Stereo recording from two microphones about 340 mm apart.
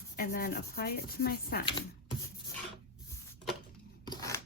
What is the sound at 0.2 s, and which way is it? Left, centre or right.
Speech, left.